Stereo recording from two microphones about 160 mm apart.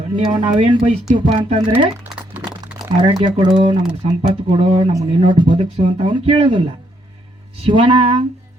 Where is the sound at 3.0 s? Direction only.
30° right (ahead or behind).